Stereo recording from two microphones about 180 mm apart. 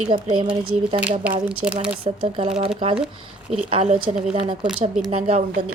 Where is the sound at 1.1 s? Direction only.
5° right (ahead or behind).